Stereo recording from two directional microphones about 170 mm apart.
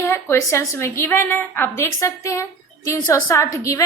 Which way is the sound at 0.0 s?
15° left (ahead or behind).